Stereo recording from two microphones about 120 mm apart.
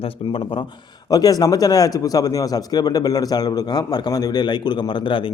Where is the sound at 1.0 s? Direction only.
30° left (ahead or behind).